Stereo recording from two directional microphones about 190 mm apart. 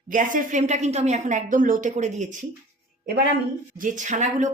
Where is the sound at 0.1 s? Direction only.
45° right (ahead or behind).